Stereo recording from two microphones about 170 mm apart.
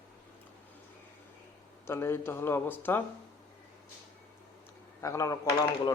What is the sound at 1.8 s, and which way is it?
Speech, 15° left (ahead or behind).